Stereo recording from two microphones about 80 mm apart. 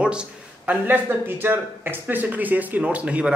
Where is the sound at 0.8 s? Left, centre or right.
Right.